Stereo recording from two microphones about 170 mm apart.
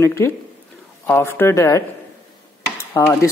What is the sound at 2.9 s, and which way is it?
Speech, 15° left (ahead or behind).